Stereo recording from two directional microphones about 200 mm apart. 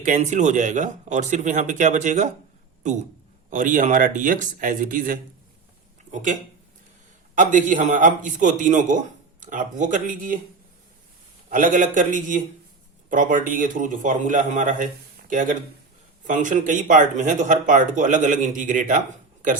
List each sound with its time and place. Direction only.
0.0 s a man's voice: 35° right (ahead or behind)
3.5 s a man's voice: 40° right (ahead or behind)
7.3 s a man's voice: 40° right (ahead or behind)
11.4 s a man's voice: 40° right (ahead or behind)